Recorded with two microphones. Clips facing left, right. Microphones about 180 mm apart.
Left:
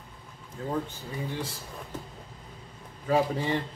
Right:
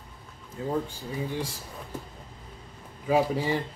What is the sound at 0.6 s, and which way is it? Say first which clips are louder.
Speech: right 2 dB; 5° right (ahead or behind).